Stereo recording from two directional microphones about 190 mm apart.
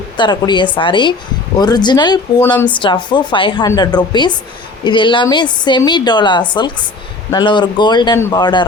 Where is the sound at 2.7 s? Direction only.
25° left (ahead or behind).